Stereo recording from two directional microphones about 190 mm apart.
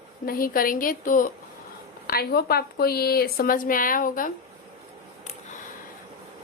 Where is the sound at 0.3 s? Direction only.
50° left (ahead or behind).